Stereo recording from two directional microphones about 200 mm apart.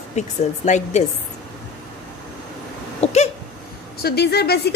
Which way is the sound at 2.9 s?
35° left (ahead or behind).